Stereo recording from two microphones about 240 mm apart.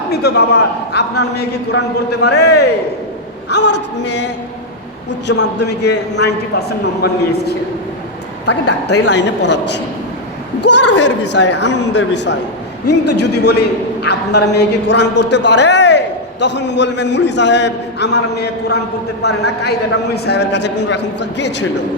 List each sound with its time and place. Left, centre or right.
0.1 s a man's voice: left
5.3 s a man's voice: left
9.0 s a man's voice: left